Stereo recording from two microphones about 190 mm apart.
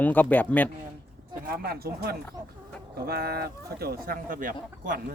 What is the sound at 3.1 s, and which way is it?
Speech, 55° right (ahead or behind).